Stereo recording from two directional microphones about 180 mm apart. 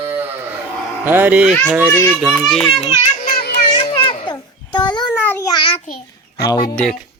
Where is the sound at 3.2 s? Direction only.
60° left (ahead or behind).